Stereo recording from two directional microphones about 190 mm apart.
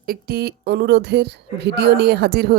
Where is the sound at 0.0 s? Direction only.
50° right (ahead or behind).